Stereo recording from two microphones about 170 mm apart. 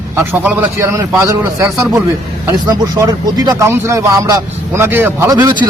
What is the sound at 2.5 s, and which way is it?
Speech, 20° right (ahead or behind).